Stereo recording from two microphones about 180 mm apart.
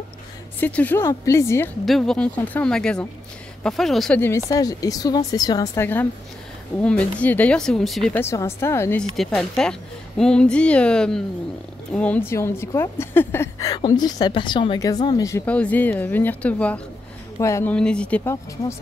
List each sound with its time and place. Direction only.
0.6 s a woman's voice: 10° left (ahead or behind)
1.9 s speech: centre (ahead or behind)
4.5 s a woman's voice: 20° left (ahead or behind); by 8.0 s centre (ahead or behind)
8.1 s a woman's voice: 15° left (ahead or behind)
9.1 s a woman's voice: centre (ahead or behind); by 17.7 s 15° left (ahead or behind)
17.7 s a woman's voice: 5° left (ahead or behind)